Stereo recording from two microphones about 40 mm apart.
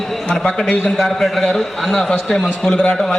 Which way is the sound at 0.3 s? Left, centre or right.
Centre.